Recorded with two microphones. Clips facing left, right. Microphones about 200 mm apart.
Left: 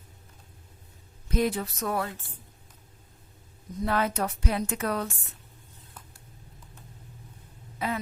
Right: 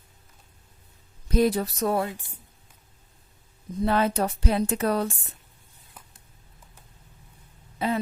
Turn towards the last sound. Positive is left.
turn(degrees=-30)  # may be behind; listen again after turning